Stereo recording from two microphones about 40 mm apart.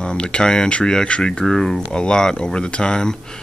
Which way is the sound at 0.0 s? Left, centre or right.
Left.